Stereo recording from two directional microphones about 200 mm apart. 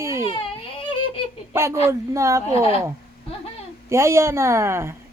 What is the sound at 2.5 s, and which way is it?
Speech, 30° left (ahead or behind).